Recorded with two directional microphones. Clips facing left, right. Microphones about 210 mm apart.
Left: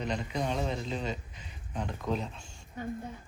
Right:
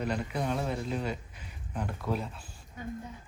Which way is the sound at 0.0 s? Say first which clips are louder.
Right 1 dB; 5° right (ahead or behind).